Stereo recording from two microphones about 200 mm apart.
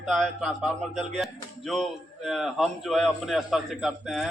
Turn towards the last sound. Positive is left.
turn(degrees=0)  # may be behind; listen again after turning